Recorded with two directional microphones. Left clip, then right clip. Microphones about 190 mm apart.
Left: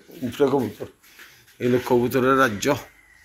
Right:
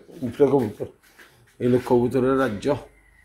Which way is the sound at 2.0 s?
5° right (ahead or behind).